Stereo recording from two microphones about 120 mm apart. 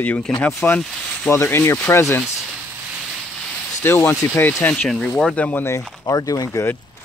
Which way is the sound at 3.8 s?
20° left (ahead or behind).